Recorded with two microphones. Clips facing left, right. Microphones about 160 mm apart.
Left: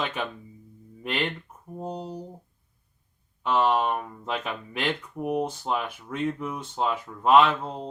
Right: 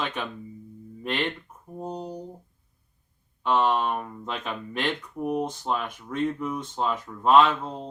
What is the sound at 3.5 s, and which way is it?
Speech, 5° left (ahead or behind).